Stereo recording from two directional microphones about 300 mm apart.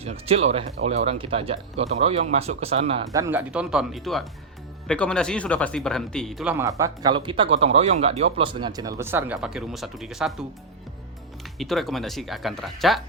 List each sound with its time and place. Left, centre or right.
0.0 s speech: centre
11.5 s speech: centre